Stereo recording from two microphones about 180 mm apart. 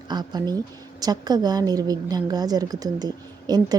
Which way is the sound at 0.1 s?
25° right (ahead or behind).